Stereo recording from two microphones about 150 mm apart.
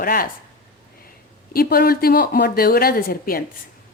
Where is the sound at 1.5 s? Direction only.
85° left.